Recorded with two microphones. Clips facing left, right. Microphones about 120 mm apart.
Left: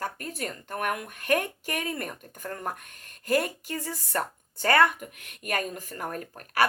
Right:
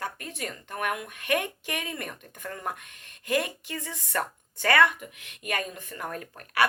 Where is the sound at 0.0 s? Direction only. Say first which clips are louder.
Left 2 dB; 40° left (ahead or behind).